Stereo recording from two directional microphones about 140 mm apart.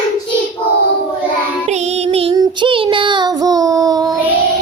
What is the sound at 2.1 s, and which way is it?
Music, 45° right (ahead or behind).